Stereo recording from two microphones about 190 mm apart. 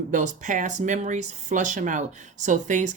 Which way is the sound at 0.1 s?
40° right (ahead or behind).